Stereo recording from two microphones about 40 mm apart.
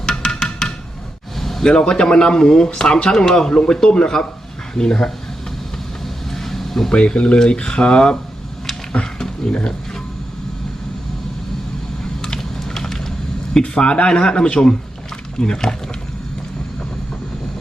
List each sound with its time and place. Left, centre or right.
0.0 s music: left
1.4 s a sound: centre
1.7 s a man's voice: left
6.3 s vehicle: centre
6.9 s a man's voice: left
8.9 s a sound: left
9.5 s a man's voice: left
12.4 s a sound: centre
13.6 s a man's voice: left